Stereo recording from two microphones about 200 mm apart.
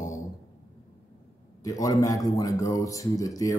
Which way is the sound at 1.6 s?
15° left (ahead or behind).